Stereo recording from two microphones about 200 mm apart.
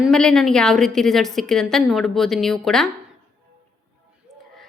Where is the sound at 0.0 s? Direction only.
5° left (ahead or behind).